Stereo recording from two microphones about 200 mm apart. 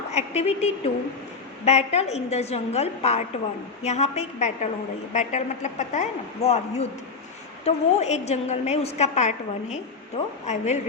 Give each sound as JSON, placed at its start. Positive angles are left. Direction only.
{"t": 0.1, "sound": "a woman's voice", "side_deg": 35}